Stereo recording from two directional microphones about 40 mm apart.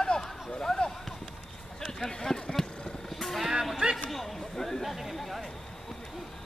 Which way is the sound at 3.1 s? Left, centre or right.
Centre.